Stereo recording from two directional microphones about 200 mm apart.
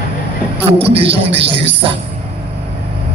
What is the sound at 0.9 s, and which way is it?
Speech, 30° right (ahead or behind).